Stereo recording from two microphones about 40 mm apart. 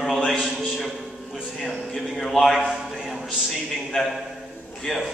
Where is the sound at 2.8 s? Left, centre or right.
Centre.